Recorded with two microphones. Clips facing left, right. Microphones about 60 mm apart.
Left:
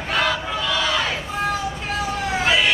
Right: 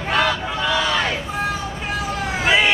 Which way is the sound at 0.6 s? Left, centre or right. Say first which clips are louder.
Right 3 dB; centre.